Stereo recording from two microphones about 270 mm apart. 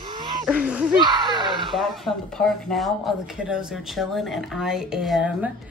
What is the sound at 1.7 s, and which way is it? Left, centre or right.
Speech, centre.